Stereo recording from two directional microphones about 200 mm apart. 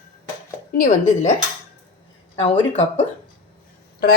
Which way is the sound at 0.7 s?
40° left (ahead or behind).